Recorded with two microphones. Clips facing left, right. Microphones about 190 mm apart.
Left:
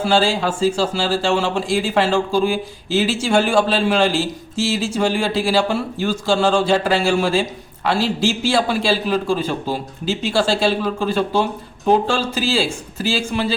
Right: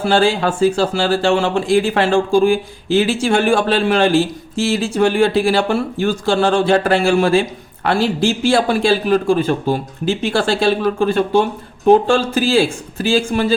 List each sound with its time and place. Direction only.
0.0 s speech: 55° right (ahead or behind)